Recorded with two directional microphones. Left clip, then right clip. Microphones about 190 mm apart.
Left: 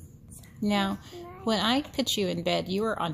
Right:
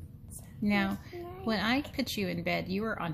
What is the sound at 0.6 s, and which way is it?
Speech, 20° left (ahead or behind).